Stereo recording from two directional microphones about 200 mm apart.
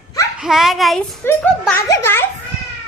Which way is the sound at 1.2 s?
10° left (ahead or behind).